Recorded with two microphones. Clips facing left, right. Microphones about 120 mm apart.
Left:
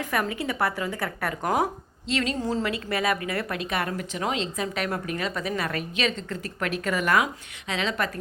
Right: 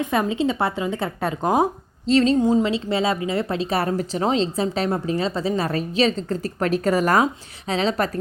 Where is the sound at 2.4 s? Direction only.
20° right (ahead or behind); by 8.1 s 35° right (ahead or behind).